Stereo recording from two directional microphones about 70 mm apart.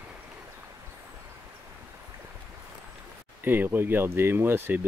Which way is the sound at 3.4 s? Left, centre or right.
Right.